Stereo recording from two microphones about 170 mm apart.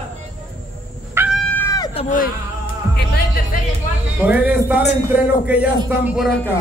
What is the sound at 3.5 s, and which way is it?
Speech, 55° left (ahead or behind).